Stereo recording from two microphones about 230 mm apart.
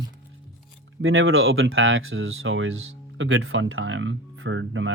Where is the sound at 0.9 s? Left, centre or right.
Right.